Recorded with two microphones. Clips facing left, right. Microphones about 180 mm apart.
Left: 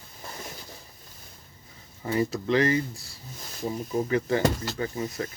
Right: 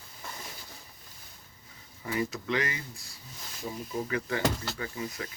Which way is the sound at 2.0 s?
35° left (ahead or behind).